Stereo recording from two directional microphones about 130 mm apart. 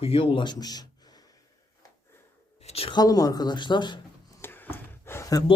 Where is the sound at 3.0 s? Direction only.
30° left (ahead or behind).